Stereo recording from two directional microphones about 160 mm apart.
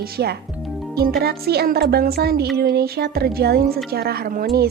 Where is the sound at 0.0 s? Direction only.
85° right; by 4.4 s 65° right (ahead or behind).